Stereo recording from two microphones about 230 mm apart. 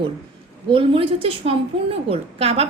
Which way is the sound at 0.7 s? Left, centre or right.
Right.